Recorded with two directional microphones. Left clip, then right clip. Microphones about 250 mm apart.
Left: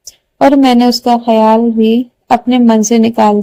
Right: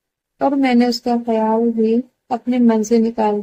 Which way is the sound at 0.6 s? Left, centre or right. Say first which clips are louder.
Left 7 dB; left.